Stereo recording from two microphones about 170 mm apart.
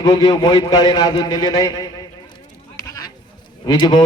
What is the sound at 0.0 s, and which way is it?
A man's voice, 25° left (ahead or behind).